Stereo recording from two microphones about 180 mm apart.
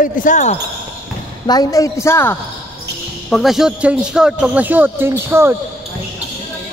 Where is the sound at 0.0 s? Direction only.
50° left (ahead or behind).